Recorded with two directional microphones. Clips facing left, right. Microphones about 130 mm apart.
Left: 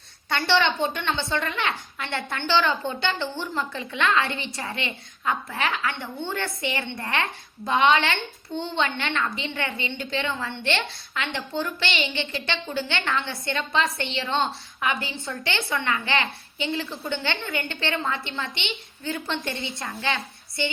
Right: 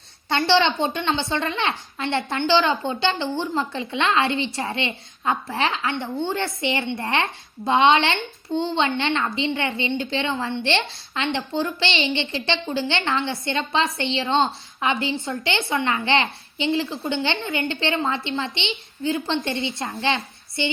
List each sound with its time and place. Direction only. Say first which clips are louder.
0.3 s a woman's voice: right 3 dB; 25° right (ahead or behind)